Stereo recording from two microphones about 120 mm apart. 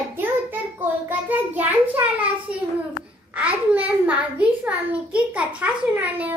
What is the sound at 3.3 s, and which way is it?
A child's voice, 10° right (ahead or behind).